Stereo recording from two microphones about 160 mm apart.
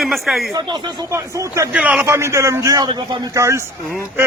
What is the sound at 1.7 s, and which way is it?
A man's voice, 10° right (ahead or behind).